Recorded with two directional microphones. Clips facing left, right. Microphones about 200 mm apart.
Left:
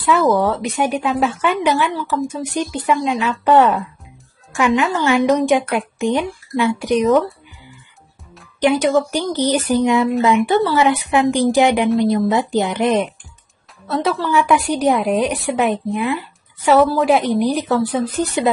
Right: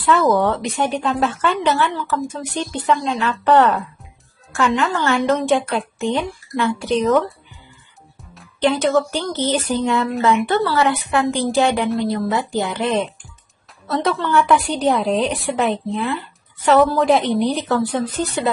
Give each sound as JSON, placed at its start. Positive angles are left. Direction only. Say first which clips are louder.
{"t": 0.0, "sound": "a woman's voice", "louder": "left 1 dB", "side_deg": 5}
{"t": 8.5, "sound": "a woman's voice", "louder": "left 2 dB", "side_deg": 10}
{"t": 13.8, "sound": "a woman's voice", "louder": "left 1 dB", "side_deg": 0}